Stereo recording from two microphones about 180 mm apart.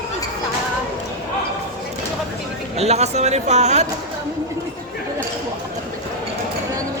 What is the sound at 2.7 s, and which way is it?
Speech, 35° right (ahead or behind).